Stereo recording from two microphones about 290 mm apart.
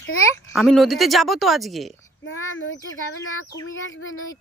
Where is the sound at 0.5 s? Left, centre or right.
Centre.